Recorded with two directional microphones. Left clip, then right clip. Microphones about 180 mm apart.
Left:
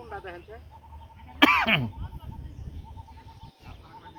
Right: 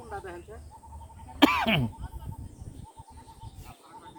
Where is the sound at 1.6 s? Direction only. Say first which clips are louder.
Left 3 dB; 35° right (ahead or behind).